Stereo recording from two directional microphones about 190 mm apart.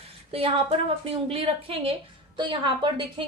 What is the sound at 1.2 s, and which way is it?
A woman's voice, 30° right (ahead or behind).